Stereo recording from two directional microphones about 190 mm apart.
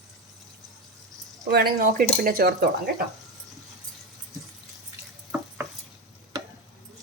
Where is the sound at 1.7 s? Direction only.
45° right (ahead or behind).